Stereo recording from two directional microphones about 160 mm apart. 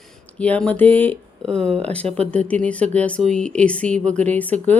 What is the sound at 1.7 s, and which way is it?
Speech, 40° right (ahead or behind).